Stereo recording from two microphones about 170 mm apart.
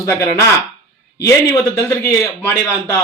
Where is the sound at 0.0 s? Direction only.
15° left (ahead or behind).